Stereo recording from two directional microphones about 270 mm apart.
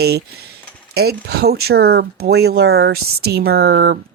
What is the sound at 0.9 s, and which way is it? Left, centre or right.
Speech, right.